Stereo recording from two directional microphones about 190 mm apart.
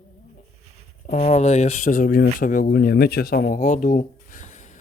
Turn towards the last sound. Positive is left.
turn(degrees=45)  # may be behind; listen again after turning